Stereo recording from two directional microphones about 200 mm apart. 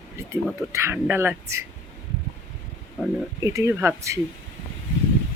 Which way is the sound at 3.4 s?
15° right (ahead or behind).